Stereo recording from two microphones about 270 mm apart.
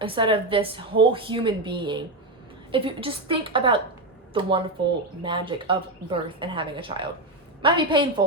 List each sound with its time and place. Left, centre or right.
0.0 s a woman's voice: centre